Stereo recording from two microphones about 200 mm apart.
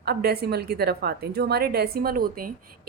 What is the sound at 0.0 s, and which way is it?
A woman's voice, 50° right (ahead or behind).